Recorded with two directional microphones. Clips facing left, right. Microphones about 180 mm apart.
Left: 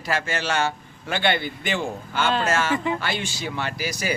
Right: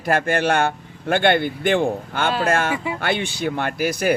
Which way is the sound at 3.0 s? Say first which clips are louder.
Right 6 dB; 60° right (ahead or behind).